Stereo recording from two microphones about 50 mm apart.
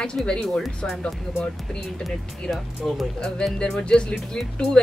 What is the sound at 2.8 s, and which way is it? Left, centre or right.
Speech, centre.